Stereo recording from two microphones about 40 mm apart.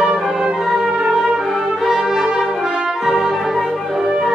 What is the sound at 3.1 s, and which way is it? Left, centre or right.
Music, centre.